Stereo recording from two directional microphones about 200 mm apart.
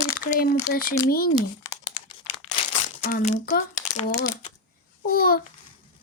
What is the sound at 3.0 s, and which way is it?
Speech, 40° left (ahead or behind).